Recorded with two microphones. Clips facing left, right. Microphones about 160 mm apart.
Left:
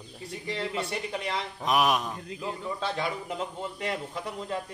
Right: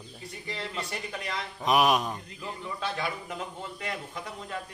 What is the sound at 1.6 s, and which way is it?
Speech, centre (ahead or behind).